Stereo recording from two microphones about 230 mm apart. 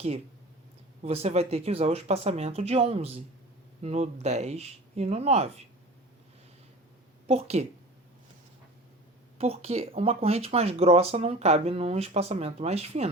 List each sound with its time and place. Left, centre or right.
1.0 s speech: right
7.3 s speech: right
9.4 s speech: right